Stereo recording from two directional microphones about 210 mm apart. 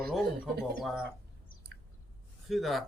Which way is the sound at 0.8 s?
Centre (ahead or behind).